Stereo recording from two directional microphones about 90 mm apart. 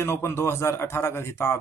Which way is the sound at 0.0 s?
30° left (ahead or behind).